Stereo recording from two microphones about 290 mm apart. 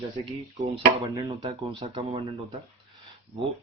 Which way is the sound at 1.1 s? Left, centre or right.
Centre.